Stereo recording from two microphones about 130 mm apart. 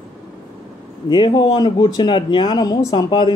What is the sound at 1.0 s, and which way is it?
Speech, 35° left (ahead or behind).